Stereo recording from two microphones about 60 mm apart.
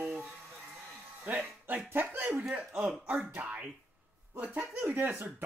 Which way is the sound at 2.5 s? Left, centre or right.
Right.